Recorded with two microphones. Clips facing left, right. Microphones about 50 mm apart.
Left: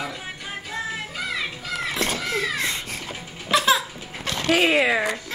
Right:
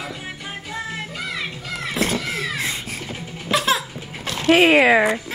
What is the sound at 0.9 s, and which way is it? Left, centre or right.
Children playing, centre.